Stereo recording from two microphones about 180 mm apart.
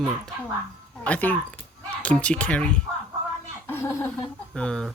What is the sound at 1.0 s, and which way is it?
Speech, 10° left (ahead or behind).